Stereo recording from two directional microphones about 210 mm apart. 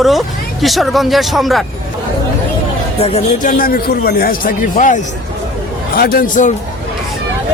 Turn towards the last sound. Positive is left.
turn(degrees=35)  # may be behind; listen again after turning